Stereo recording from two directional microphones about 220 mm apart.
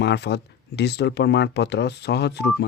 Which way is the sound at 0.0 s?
50° left (ahead or behind).